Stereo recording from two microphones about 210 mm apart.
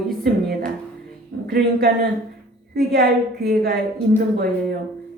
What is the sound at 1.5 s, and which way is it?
A woman's voice, 45° right (ahead or behind).